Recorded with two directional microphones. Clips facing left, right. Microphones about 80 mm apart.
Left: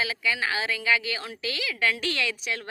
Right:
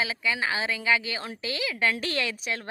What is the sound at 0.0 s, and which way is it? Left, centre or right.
A woman's voice, right.